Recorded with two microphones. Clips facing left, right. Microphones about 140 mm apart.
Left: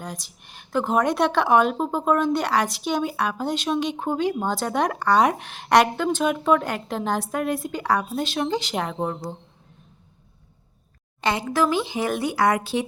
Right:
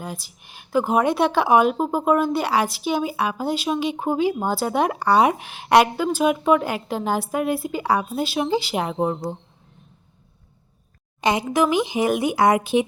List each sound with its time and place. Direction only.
0.0 s a woman's voice: 5° right (ahead or behind)
11.2 s speech: 15° right (ahead or behind)